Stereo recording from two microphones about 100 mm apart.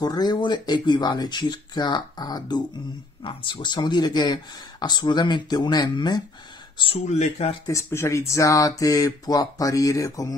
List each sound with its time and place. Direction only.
0.0 s speech: 45° left (ahead or behind)
3.3 s speech: 55° left (ahead or behind)
6.8 s speech: 85° left
7.6 s speech: 30° left (ahead or behind)